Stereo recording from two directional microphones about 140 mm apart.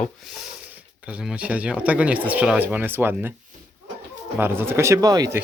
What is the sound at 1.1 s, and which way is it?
Speech, 10° right (ahead or behind).